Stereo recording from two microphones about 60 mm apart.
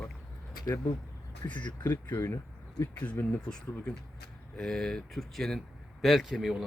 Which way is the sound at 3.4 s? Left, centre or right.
Centre.